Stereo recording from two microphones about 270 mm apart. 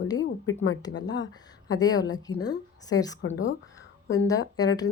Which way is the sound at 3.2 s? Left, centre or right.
Left.